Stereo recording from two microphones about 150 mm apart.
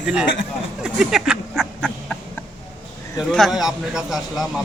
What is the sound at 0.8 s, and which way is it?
Duck, 5° right (ahead or behind).